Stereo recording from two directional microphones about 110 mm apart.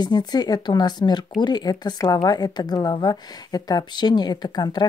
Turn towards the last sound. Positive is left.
turn(degrees=40)  # may be behind; listen again after turning